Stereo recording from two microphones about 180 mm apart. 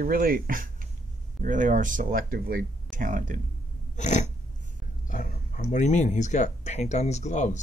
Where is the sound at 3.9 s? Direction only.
40° left (ahead or behind).